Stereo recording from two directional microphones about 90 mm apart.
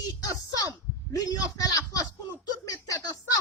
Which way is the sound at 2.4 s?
45° left (ahead or behind).